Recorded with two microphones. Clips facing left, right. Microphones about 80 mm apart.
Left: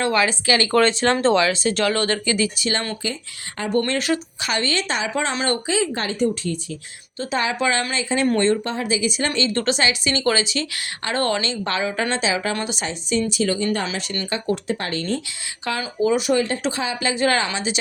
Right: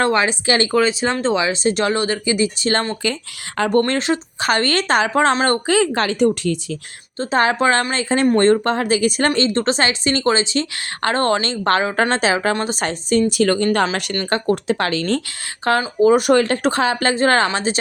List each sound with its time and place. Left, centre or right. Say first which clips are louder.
0.1 s speech: right 2 dB; right
0.7 s speech: even; centre
1.4 s speech: right 1 dB; right
2.6 s a woman's voice: right 5 dB; right
4.4 s a woman's voice: right 6 dB; right
5.7 s speech: right 6 dB; right
7.2 s a woman's voice: right 6 dB; right
9.5 s speech: right 3 dB; right
9.7 s a woman's voice: right 3 dB; right
13.4 s a woman's voice: right 6 dB; right
14.7 s speech: right 5 dB; right
15.8 s a woman's voice: right 5 dB; right
16.2 s speech: right 5 dB; right
17.2 s a woman's voice: right 2 dB; right